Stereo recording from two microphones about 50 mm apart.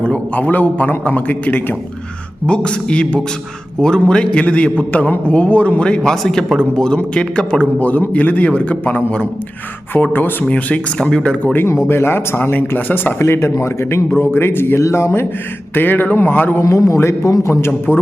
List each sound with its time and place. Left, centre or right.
0.0 s a man's voice: left
2.6 s speech: left
7.6 s a man's voice: left
10.4 s speech: left
10.9 s speech: centre
11.9 s a man's voice: left
13.1 s speech: left
14.8 s speech: left
15.7 s a man's voice: left
16.6 s a man's voice: left
17.9 s a man's voice: right